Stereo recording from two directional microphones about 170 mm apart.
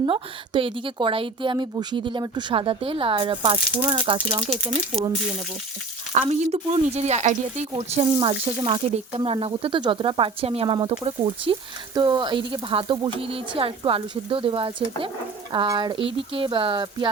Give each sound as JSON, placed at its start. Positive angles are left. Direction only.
{"t": 0.0, "sound": "a woman's voice", "side_deg": -30}
{"t": 6.1, "sound": "a woman's voice", "side_deg": -40}